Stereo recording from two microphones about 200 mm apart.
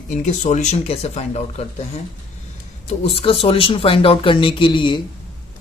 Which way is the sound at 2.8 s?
30° left (ahead or behind).